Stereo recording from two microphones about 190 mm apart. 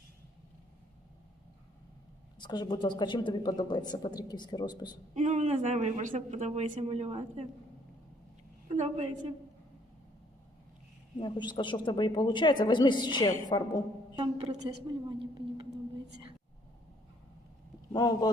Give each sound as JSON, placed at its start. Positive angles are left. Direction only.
{"t": 2.4, "sound": "a woman's voice", "side_deg": 20}
{"t": 5.1, "sound": "a woman's voice", "side_deg": -40}
{"t": 8.7, "sound": "a woman's voice", "side_deg": -30}
{"t": 11.2, "sound": "a woman's voice", "side_deg": 25}
{"t": 14.2, "sound": "a woman's voice", "side_deg": -30}
{"t": 17.9, "sound": "a woman's voice", "side_deg": 20}